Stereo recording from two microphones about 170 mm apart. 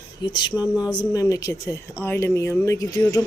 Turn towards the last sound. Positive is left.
turn(degrees=20)  # may be behind; listen again after turning